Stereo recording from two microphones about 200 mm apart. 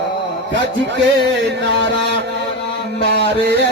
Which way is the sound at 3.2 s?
55° right (ahead or behind).